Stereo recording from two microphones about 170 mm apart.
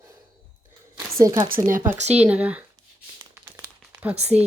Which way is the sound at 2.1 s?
10° right (ahead or behind).